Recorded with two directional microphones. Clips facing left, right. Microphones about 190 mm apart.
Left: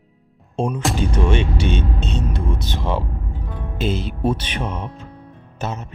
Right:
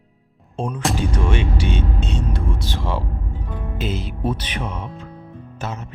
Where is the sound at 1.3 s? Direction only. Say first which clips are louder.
Left 2 dB; 25° left (ahead or behind).